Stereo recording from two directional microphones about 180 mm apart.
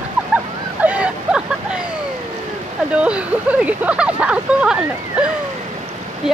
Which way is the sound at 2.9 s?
5° right (ahead or behind).